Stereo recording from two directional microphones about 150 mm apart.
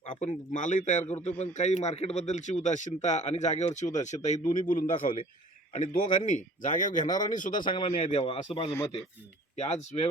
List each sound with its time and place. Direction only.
0.2 s speech: 50° left (ahead or behind)